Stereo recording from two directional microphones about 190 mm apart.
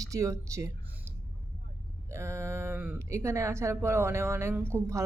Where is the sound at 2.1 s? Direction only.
15° right (ahead or behind).